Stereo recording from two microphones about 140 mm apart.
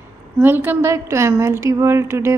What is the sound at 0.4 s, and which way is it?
A woman's voice, 15° right (ahead or behind).